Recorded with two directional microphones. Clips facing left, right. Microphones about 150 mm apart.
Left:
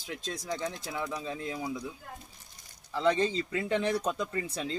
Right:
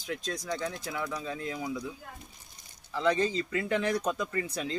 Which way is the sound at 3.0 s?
30° left (ahead or behind).